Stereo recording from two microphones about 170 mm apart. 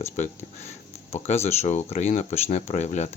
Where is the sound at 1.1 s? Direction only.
40° left (ahead or behind).